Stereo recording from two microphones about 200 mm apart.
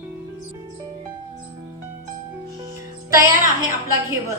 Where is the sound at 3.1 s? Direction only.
15° right (ahead or behind).